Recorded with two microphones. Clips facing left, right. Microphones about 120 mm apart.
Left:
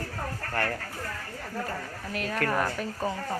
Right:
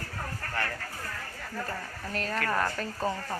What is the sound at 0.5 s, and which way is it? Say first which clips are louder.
Speech: left 4 dB; 50° left (ahead or behind).